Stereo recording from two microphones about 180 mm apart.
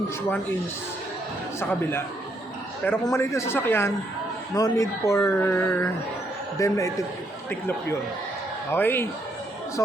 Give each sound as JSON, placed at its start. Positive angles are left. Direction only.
{"t": 1.5, "sound": "speech", "side_deg": 15}
{"t": 8.7, "sound": "speech", "side_deg": 10}